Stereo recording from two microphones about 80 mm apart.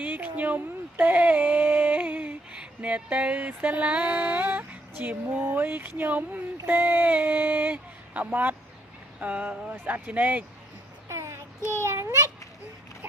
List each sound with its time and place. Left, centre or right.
0.0 s speech: right
5.5 s speech: right
11.1 s child singing: right
11.9 s a child's voice: right